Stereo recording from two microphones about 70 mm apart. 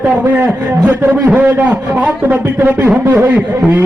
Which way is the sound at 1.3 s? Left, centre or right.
Right.